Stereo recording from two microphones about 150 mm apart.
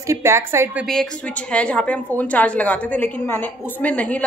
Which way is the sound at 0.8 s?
5° left (ahead or behind).